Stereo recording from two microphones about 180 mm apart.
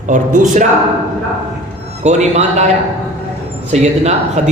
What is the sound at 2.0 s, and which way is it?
Speech, 40° right (ahead or behind).